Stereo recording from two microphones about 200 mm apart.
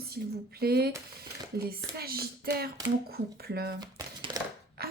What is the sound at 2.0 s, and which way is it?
Speech, 50° right (ahead or behind).